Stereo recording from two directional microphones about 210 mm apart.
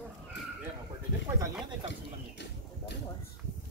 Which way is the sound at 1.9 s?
55° left (ahead or behind).